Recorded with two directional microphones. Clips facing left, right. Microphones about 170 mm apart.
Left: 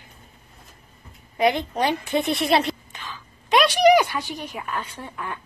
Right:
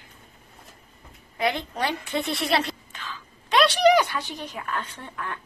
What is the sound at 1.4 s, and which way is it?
A woman's voice, 20° left (ahead or behind).